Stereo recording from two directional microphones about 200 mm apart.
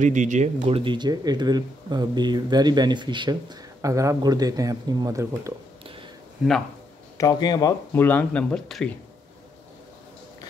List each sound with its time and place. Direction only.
0.0 s speech: 40° right (ahead or behind); by 5.5 s 15° right (ahead or behind)
6.4 s speech: 5° right (ahead or behind)
7.2 s speech: 20° left (ahead or behind)
7.9 s speech: 10° left (ahead or behind)